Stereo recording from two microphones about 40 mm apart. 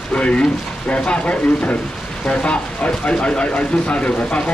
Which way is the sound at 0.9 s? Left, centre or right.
Left.